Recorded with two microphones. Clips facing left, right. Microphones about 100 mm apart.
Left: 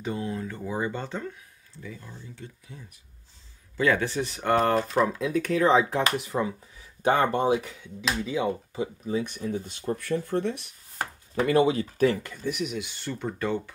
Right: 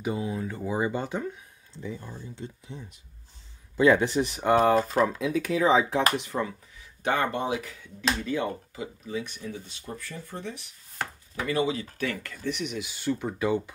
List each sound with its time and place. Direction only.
0.0 s speech: 10° right (ahead or behind)
7.0 s speech: 30° left (ahead or behind)
7.8 s speech: 10° left (ahead or behind)
8.7 s speech: 30° left (ahead or behind)
9.3 s speech: 40° left (ahead or behind)
9.9 s speech: 65° left (ahead or behind)
11.3 s speech: 45° left (ahead or behind)
12.4 s speech: 5° left (ahead or behind)